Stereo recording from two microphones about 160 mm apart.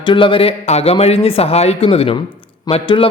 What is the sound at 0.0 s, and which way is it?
A man's voice, 30° left (ahead or behind).